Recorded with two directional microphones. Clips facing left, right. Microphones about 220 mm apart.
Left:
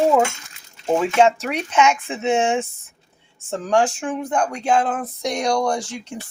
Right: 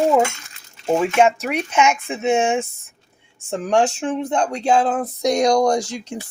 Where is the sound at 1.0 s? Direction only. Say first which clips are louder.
Even; 10° right (ahead or behind).